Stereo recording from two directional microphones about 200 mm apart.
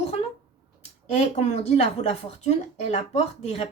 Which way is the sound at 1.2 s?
35° left (ahead or behind).